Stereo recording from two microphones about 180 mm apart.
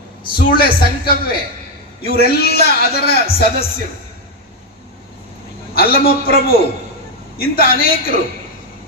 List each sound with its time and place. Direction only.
0.3 s a man's voice: 55° left (ahead or behind)
5.7 s a man's voice: 55° left (ahead or behind)